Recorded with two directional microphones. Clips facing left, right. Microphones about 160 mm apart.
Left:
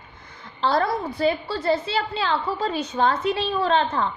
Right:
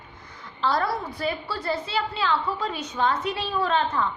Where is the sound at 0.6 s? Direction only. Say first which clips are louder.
Left 3 dB; 30° left (ahead or behind).